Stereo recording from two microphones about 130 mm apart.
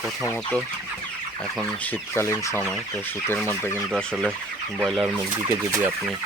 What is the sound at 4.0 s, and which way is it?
Speech, 5° left (ahead or behind).